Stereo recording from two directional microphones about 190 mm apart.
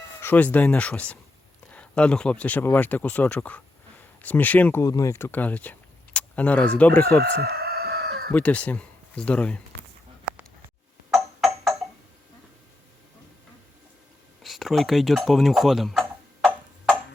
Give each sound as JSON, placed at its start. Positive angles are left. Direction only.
{"t": 0.2, "sound": "speech", "side_deg": 10}
{"t": 7.2, "sound": "chicken", "side_deg": -55}
{"t": 8.3, "sound": "speech", "side_deg": 5}
{"t": 11.1, "sound": "music", "side_deg": 0}
{"t": 14.4, "sound": "speech", "side_deg": 0}